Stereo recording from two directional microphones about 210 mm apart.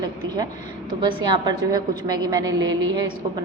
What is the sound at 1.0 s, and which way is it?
A woman's voice, 20° right (ahead or behind).